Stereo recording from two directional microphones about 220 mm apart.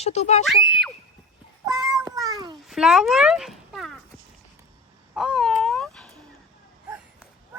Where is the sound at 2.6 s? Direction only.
Centre (ahead or behind).